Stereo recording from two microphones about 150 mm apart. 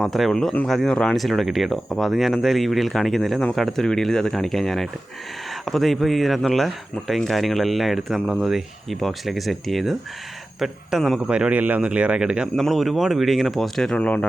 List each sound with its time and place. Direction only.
0.0 s speech: centre (ahead or behind)